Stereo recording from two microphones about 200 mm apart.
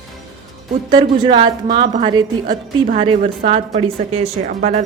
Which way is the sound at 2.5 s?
40° right (ahead or behind).